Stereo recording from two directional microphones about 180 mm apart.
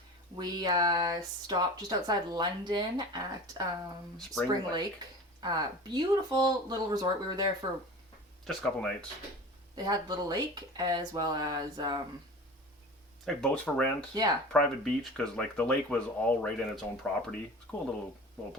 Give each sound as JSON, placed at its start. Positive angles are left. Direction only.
{"t": 0.3, "sound": "speech", "side_deg": -20}
{"t": 4.4, "sound": "speech", "side_deg": -20}
{"t": 8.4, "sound": "speech", "side_deg": 5}
{"t": 9.7, "sound": "speech", "side_deg": -20}
{"t": 13.2, "sound": "speech", "side_deg": 5}
{"t": 14.1, "sound": "speech", "side_deg": -20}
{"t": 14.5, "sound": "speech", "side_deg": 5}